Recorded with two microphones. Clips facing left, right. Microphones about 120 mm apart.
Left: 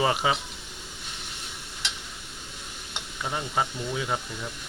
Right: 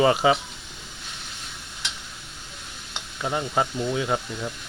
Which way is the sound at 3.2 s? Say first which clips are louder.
Right 4 dB; 15° right (ahead or behind).